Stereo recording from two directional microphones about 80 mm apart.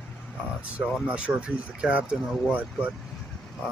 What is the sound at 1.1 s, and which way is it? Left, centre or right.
Speech, centre.